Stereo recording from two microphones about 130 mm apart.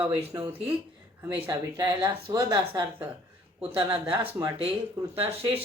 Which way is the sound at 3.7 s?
40° right (ahead or behind).